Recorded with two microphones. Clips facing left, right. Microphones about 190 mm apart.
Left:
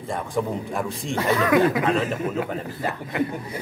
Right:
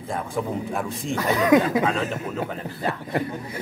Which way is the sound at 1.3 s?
20° right (ahead or behind).